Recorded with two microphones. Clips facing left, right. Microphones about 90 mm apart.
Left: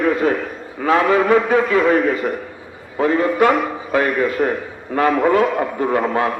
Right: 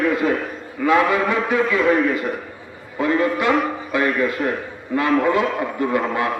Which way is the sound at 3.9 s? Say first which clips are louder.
Left 3 dB; 45° left (ahead or behind).